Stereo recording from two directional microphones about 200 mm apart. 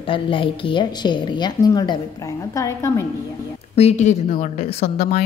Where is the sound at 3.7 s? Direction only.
35° left (ahead or behind).